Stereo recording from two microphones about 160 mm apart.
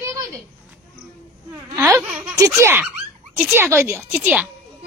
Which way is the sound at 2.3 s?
20° right (ahead or behind).